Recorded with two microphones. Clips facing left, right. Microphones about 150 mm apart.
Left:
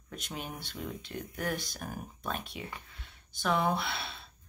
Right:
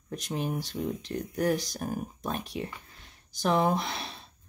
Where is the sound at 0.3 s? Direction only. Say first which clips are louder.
Right 10 dB; 40° right (ahead or behind).